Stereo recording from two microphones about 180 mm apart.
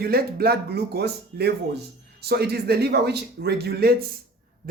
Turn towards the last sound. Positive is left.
turn(degrees=-60)  # may be behind; listen again after turning